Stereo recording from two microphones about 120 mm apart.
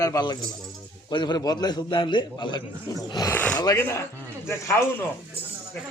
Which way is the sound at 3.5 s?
30° left (ahead or behind).